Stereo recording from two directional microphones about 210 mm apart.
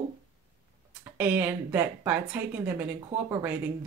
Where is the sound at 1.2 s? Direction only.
10° right (ahead or behind).